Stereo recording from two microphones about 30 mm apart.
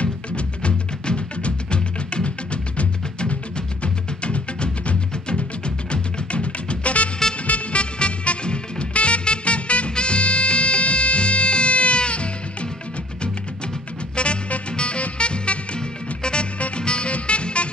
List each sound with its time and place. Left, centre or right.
0.6 s music: left
14.1 s music: left